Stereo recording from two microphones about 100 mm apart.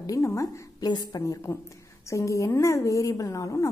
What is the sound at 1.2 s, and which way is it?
A woman's voice, 30° left (ahead or behind).